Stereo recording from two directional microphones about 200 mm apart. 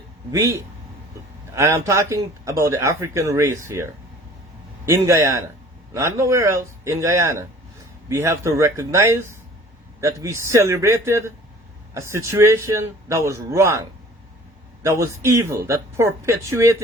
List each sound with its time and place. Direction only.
0.3 s speech: 15° right (ahead or behind)
1.5 s speech: 15° right (ahead or behind)
4.9 s speech: 15° right (ahead or behind)
14.8 s speech: 15° right (ahead or behind)